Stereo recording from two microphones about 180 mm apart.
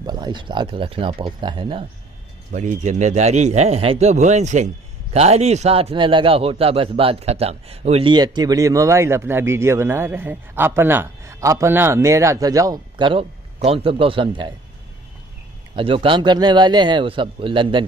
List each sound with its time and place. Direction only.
0.0 s speech: 25° right (ahead or behind)
2.5 s a man's voice: 40° right (ahead or behind); by 14.5 s 25° right (ahead or behind)
15.7 s speech: 30° right (ahead or behind)